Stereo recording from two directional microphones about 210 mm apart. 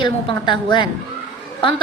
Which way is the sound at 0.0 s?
25° left (ahead or behind).